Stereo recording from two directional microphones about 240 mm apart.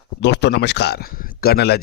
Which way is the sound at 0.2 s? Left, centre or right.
Left.